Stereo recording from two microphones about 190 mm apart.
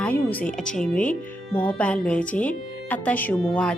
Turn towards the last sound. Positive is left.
turn(degrees=5)  # may be behind; listen again after turning